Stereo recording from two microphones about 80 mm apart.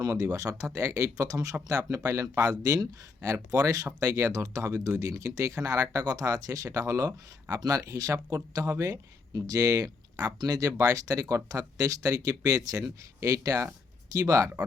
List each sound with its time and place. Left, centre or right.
0.0 s speech: right